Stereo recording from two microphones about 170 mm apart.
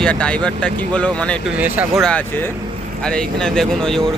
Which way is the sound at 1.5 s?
10° right (ahead or behind).